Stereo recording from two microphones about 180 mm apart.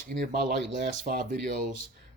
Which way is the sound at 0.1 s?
45° right (ahead or behind).